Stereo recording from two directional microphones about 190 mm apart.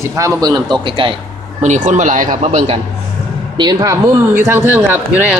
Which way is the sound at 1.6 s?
40° right (ahead or behind).